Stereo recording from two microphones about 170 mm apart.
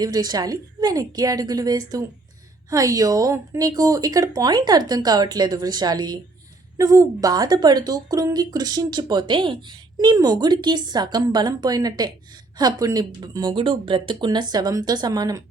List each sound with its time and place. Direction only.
0.0 s a woman's voice: 20° right (ahead or behind)